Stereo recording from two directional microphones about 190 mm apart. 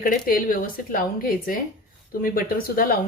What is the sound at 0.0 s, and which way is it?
Speech, 45° left (ahead or behind).